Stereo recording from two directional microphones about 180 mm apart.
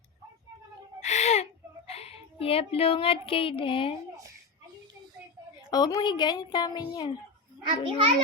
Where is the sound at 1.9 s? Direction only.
35° left (ahead or behind).